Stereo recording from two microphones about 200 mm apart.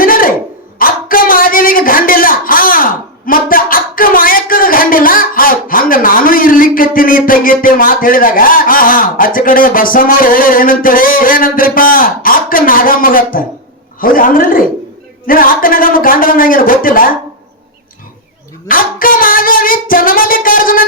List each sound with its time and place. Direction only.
0.0 s a sound: 45° left (ahead or behind)
14.0 s a man's voice: 45° left (ahead or behind)
18.7 s music: 45° left (ahead or behind)